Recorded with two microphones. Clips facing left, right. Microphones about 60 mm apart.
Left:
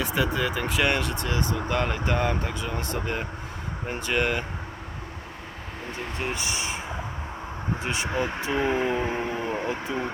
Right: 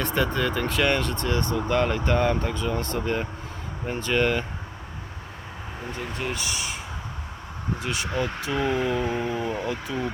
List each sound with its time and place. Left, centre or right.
0.0 s speech: centre
5.9 s speech: left
7.8 s speech: left